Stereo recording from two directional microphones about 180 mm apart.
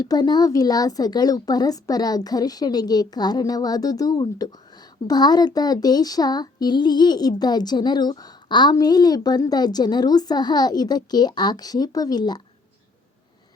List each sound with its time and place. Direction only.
0.0 s speech: 20° left (ahead or behind)